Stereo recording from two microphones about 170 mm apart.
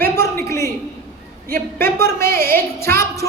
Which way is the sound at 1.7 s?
15° left (ahead or behind).